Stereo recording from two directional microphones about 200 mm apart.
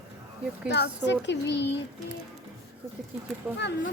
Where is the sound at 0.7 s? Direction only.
60° left (ahead or behind).